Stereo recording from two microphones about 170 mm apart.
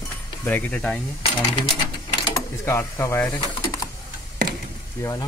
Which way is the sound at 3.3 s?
20° left (ahead or behind).